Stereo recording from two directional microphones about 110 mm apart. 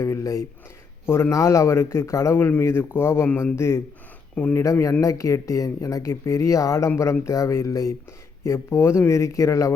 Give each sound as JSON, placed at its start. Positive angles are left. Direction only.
{"t": 0.0, "sound": "speech", "side_deg": 25}